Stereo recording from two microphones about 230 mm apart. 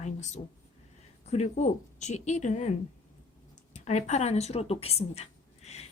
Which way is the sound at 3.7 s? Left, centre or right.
Left.